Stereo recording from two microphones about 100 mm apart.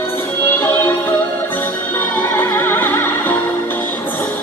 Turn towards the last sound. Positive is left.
turn(degrees=20)  # may be behind; listen again after turning